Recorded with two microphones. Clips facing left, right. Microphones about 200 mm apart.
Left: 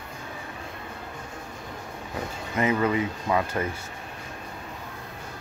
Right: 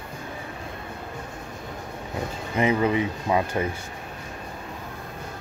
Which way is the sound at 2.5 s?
20° right (ahead or behind).